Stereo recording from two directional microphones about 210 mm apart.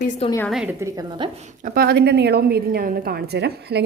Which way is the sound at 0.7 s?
15° right (ahead or behind).